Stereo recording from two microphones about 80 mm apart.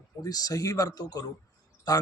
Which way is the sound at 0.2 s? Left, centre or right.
Left.